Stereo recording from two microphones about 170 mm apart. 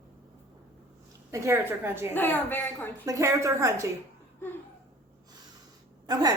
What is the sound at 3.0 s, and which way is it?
Speech, 15° right (ahead or behind).